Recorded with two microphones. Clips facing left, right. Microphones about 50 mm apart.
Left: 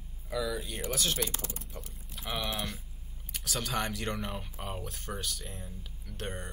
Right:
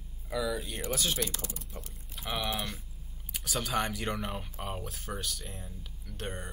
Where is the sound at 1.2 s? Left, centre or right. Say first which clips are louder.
Even; left.